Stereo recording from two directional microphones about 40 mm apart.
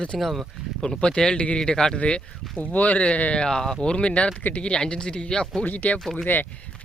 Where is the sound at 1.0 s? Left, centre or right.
Centre.